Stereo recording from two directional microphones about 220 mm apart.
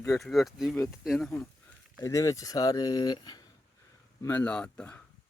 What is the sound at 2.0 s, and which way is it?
Speech, 15° left (ahead or behind).